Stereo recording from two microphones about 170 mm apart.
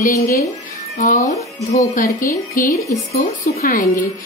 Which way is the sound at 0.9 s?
50° left (ahead or behind).